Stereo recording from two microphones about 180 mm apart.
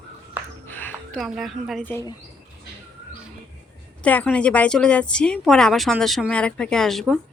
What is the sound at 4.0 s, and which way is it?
Speech, 10° left (ahead or behind).